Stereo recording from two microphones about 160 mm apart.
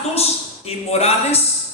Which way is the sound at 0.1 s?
40° left (ahead or behind).